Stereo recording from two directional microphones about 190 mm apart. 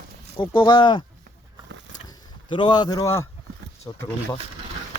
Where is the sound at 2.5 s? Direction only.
25° left (ahead or behind).